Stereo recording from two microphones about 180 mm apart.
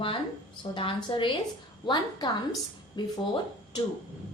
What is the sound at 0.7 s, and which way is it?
A woman's voice, 30° left (ahead or behind).